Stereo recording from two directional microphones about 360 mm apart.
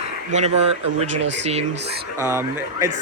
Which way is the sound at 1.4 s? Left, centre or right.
Centre.